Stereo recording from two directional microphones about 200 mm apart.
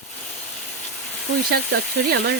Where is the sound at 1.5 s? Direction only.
55° right (ahead or behind).